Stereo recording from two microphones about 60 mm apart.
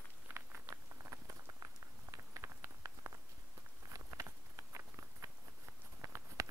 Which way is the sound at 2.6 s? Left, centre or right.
Right.